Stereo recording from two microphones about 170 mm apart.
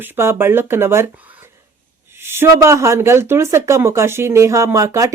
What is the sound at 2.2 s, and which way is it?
Speech, 15° right (ahead or behind).